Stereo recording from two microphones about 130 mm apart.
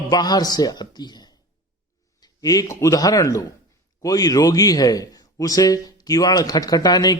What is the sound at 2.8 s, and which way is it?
A man's voice, 25° left (ahead or behind).